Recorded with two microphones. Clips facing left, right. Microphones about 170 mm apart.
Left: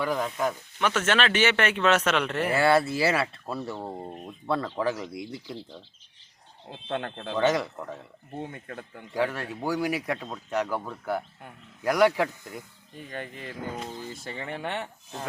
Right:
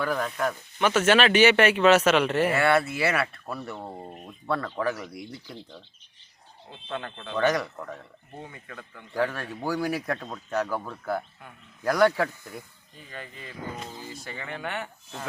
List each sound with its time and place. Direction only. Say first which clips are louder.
0.0 s speech: even; 15° left (ahead or behind)
0.8 s speech: right 4 dB; 5° right (ahead or behind)
2.5 s speech: left 1 dB; 30° left (ahead or behind)
3.8 s speech: left 3 dB; 15° left (ahead or behind)
6.8 s speech: left 3 dB; 60° left (ahead or behind)
7.3 s speech: even; 25° left (ahead or behind)
8.4 s speech: left 5 dB; 55° left (ahead or behind)
9.1 s speech: even; 15° left (ahead or behind)
13.1 s speech: left 4 dB; 50° left (ahead or behind)
14.3 s speech: left 2 dB; 30° left (ahead or behind)